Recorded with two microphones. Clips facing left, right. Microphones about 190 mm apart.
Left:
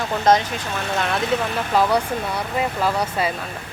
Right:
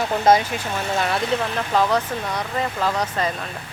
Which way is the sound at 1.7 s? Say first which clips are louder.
Left 2 dB; 10° left (ahead or behind).